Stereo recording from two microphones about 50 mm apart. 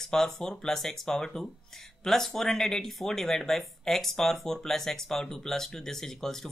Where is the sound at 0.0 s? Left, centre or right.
Centre.